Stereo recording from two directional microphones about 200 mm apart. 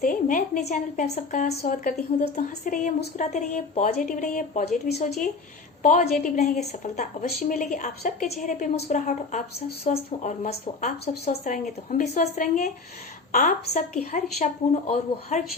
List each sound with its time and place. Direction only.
0.0 s a sound: 45° left (ahead or behind)
0.6 s a woman's voice: 35° left (ahead or behind)
5.8 s a woman's voice: 40° left (ahead or behind)